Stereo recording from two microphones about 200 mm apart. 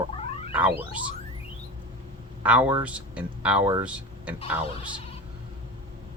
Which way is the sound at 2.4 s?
5° right (ahead or behind).